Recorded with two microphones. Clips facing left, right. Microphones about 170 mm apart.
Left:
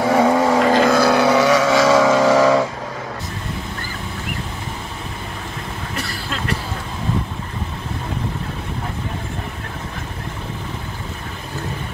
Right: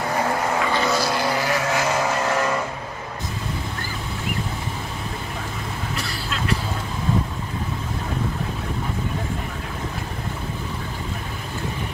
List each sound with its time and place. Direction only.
0.0 s vehicle: 90° left
0.8 s vehicle: 60° left (ahead or behind); by 2.6 s 90° left